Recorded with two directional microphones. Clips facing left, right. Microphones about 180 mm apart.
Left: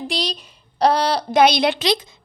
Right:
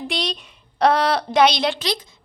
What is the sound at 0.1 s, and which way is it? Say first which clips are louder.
A woman's voice: left 1 dB; centre (ahead or behind).